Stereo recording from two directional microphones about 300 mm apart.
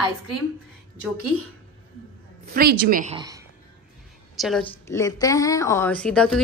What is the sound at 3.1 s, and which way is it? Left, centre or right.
Speech, centre.